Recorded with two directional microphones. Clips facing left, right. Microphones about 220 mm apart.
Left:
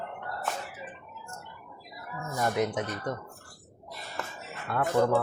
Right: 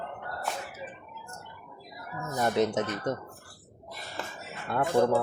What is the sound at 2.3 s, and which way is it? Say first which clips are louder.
Speech: right 2 dB; 25° right (ahead or behind).